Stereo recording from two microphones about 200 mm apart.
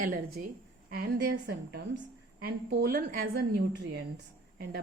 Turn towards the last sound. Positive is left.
turn(degrees=-55)  # may be behind; listen again after turning